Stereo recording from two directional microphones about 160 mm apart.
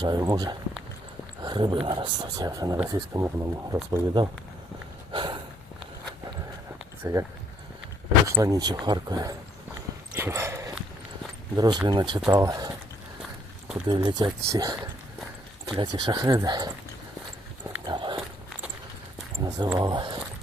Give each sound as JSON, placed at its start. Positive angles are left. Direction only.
{"t": 0.0, "sound": "speech", "side_deg": -25}
{"t": 5.1, "sound": "sniff", "side_deg": -30}
{"t": 7.0, "sound": "speech", "side_deg": -20}
{"t": 8.4, "sound": "speech", "side_deg": -25}
{"t": 10.2, "sound": "a sound", "side_deg": -15}
{"t": 11.5, "sound": "speech", "side_deg": -25}
{"t": 13.8, "sound": "speech", "side_deg": -30}
{"t": 15.8, "sound": "speech", "side_deg": -25}
{"t": 17.8, "sound": "dog", "side_deg": -30}
{"t": 19.4, "sound": "a sound", "side_deg": -25}
{"t": 19.8, "sound": "speech", "side_deg": -25}